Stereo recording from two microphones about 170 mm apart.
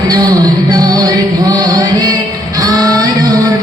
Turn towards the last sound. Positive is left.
turn(degrees=-20)  # may be behind; listen again after turning